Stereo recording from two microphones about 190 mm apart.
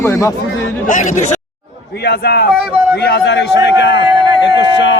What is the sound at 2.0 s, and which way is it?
A man's voice, 55° left (ahead or behind).